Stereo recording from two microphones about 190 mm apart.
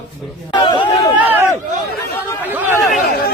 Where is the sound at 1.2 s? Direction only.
10° right (ahead or behind).